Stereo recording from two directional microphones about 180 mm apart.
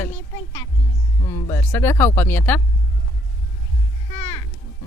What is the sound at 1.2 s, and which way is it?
Speech, 15° left (ahead or behind).